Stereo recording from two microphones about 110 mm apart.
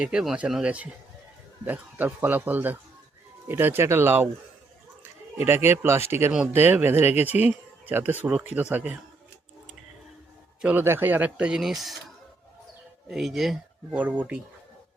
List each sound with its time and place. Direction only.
0.0 s speech: 5° right (ahead or behind)
5.4 s speech: 20° right (ahead or behind)
10.6 s speech: 15° right (ahead or behind)
13.1 s speech: centre (ahead or behind)
13.9 s speech: 15° right (ahead or behind)